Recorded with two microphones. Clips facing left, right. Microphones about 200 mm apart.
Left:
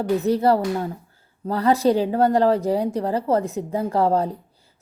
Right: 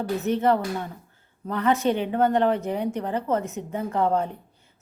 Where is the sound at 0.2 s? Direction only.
35° left (ahead or behind).